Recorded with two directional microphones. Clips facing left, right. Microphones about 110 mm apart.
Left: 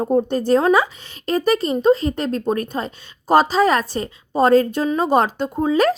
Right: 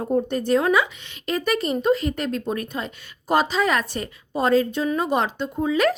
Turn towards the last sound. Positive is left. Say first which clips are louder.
# left 4 dB
turn(degrees=35)  # may be behind; listen again after turning